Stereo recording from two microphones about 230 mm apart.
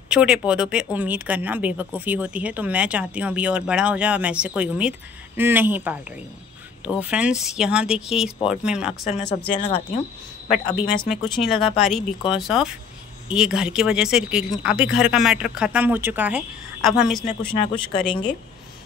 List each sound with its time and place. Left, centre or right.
0.1 s speech: centre
9.5 s speech: left
10.5 s speech: centre
17.7 s speech: left